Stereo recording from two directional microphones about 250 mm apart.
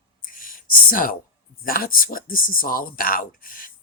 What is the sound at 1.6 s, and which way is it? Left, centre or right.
Speech, left.